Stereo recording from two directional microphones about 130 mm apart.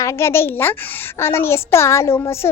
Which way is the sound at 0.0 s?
20° left (ahead or behind).